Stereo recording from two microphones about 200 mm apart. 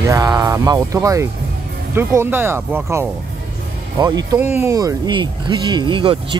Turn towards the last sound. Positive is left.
turn(degrees=-25)  # may be behind; listen again after turning